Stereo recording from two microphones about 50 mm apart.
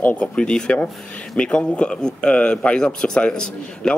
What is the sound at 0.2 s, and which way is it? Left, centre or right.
Speech, centre.